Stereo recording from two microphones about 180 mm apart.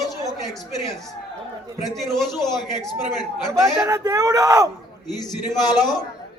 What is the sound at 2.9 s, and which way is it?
Speech, 20° left (ahead or behind).